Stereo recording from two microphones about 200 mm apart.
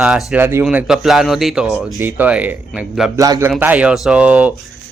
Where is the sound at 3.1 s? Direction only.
15° right (ahead or behind).